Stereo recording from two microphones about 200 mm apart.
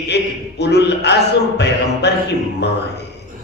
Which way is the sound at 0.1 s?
55° left (ahead or behind).